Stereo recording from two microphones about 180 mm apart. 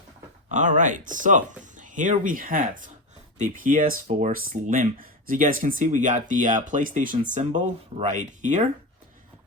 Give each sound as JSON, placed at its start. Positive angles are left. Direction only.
{"t": 0.5, "sound": "speech", "side_deg": -45}